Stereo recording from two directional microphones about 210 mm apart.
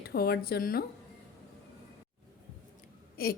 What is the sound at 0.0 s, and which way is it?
Speech, 50° left (ahead or behind).